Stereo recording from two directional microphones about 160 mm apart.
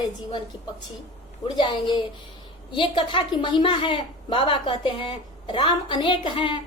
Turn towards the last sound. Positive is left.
turn(degrees=30)  # may be behind; listen again after turning